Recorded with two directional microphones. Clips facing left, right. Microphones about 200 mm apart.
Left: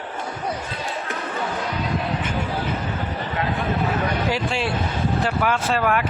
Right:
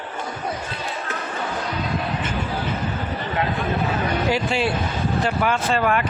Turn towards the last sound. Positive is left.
turn(degrees=5)  # may be behind; listen again after turning